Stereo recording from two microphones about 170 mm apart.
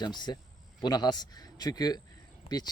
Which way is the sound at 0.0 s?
25° left (ahead or behind).